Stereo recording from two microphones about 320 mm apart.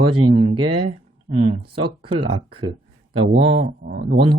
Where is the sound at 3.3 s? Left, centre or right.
Right.